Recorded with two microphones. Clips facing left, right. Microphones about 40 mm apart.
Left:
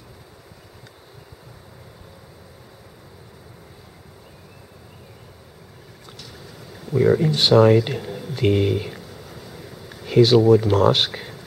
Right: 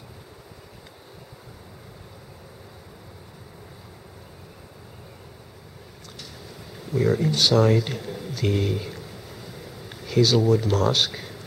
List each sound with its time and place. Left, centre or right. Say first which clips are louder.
6.9 s speech: left 5 dB; centre
7.3 s speech: left 6 dB; left
10.0 s speech: left 6 dB; left